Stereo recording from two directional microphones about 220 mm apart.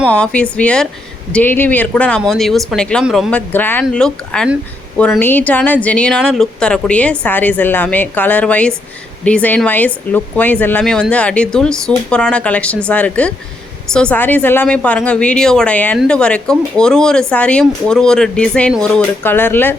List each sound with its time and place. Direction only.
0.1 s a woman's voice: 5° left (ahead or behind)